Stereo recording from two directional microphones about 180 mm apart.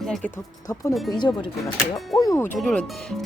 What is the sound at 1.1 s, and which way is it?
Speech, 25° left (ahead or behind).